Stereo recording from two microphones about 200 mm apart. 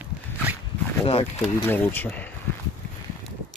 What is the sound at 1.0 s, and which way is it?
Speech, 30° left (ahead or behind).